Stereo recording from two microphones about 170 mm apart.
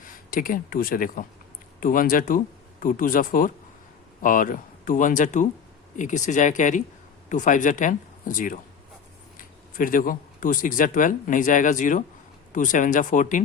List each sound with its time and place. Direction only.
0.0 s speech: 55° left (ahead or behind)